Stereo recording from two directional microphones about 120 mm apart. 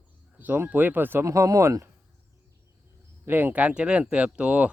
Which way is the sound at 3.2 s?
15° right (ahead or behind).